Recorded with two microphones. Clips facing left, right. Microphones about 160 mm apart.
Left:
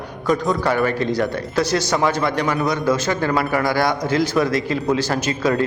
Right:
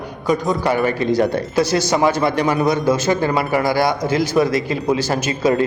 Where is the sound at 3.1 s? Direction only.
20° right (ahead or behind).